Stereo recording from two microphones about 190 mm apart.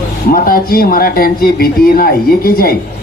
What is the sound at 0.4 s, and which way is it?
Speech, 50° left (ahead or behind).